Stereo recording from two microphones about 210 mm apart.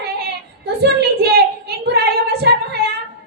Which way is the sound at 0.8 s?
50° right (ahead or behind).